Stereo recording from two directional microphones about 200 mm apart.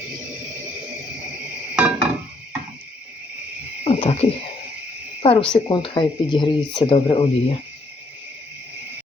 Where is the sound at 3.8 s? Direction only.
30° left (ahead or behind).